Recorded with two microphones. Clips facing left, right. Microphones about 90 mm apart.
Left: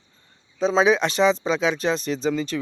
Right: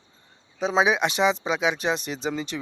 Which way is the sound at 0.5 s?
15° right (ahead or behind).